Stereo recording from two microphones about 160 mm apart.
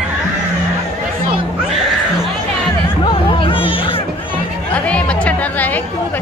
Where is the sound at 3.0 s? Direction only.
35° left (ahead or behind).